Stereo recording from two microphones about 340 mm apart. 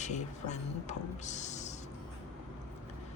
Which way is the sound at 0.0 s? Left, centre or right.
Left.